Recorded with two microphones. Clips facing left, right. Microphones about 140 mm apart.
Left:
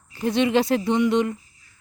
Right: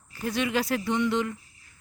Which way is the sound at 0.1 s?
25° left (ahead or behind).